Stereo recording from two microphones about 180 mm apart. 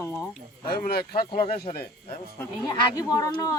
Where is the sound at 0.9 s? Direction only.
60° left (ahead or behind).